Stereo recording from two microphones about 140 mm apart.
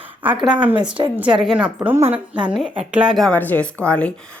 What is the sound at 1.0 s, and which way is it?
A woman's voice, 10° right (ahead or behind).